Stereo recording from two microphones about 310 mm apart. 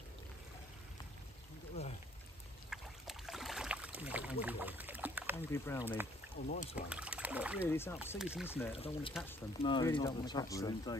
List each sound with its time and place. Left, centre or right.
2.7 s rowboat: centre
5.3 s speech: centre
6.4 s speech: left
6.9 s speech: centre
7.6 s speech: centre
8.7 s speech: centre
9.1 s speech: centre